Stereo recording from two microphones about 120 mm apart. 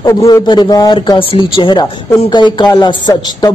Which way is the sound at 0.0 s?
30° left (ahead or behind).